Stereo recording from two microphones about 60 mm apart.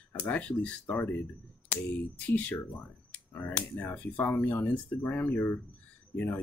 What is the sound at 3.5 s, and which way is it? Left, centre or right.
Speech, left.